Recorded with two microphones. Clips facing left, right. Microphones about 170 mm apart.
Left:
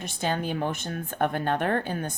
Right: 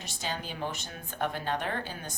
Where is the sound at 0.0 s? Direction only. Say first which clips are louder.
Left 8 dB; 55° left (ahead or behind).